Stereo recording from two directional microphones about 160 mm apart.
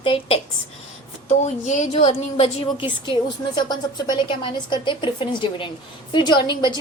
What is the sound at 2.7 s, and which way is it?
A woman's voice, 30° left (ahead or behind).